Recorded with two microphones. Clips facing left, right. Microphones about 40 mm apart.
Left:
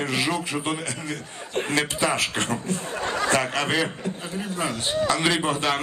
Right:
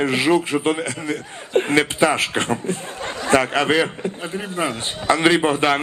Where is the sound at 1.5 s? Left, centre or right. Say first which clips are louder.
Right 7 dB; right.